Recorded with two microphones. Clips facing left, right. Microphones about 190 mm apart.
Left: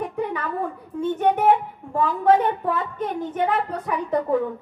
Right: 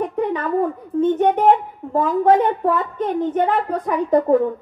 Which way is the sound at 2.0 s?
45° right (ahead or behind).